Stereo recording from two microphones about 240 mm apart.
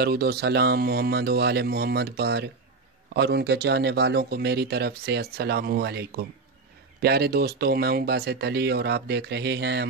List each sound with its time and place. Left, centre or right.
0.0 s speech: right